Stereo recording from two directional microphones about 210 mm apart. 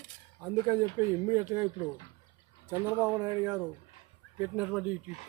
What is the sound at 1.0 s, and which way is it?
Speech, 15° right (ahead or behind).